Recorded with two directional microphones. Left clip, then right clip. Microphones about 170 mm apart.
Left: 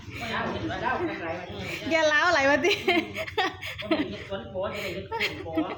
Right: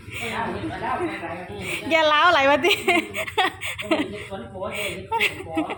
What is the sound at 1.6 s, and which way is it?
Speech, 10° right (ahead or behind).